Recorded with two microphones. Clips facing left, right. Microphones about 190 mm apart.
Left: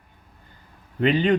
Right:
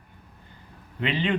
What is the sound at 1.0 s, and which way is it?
Speech, 45° left (ahead or behind).